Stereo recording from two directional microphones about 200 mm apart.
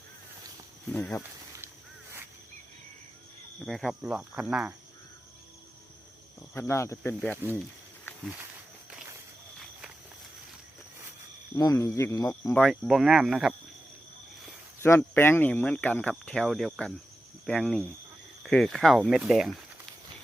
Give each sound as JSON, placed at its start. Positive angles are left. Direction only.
{"t": 0.9, "sound": "speech", "side_deg": 5}
{"t": 1.2, "sound": "a sound", "side_deg": -15}
{"t": 3.6, "sound": "speech", "side_deg": 0}
{"t": 6.5, "sound": "speech", "side_deg": 10}
{"t": 7.4, "sound": "speech", "side_deg": -10}
{"t": 11.5, "sound": "speech", "side_deg": 15}
{"t": 12.6, "sound": "speech", "side_deg": 0}
{"t": 14.8, "sound": "speech", "side_deg": 10}